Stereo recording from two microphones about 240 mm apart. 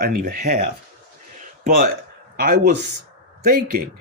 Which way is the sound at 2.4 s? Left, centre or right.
Right.